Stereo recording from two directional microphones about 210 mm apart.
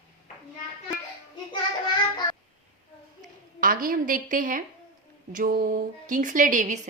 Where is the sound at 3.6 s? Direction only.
40° right (ahead or behind).